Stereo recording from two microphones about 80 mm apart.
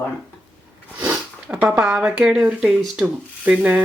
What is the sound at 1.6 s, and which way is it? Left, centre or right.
Speech, centre.